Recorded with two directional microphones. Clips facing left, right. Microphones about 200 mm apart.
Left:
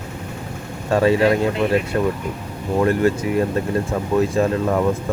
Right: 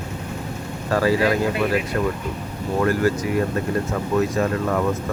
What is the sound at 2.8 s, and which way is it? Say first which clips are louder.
Speech: left 3 dB; 25° left (ahead or behind).